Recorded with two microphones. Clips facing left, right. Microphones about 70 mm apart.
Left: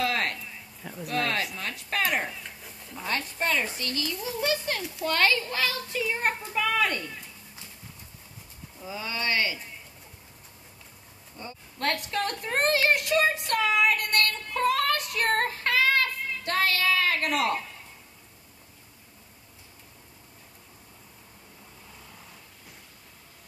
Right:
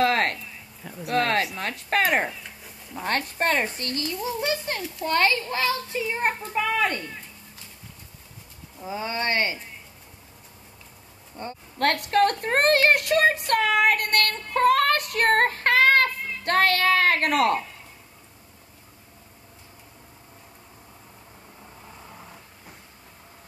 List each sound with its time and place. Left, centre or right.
0.0 s a sound: right
0.4 s a sound: centre
1.0 s speech: right
2.4 s dog: centre
3.0 s speech: right
4.4 s a child's voice: centre
8.8 s speech: right
11.3 s speech: right